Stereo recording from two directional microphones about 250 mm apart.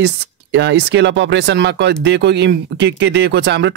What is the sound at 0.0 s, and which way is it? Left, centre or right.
Speech, right.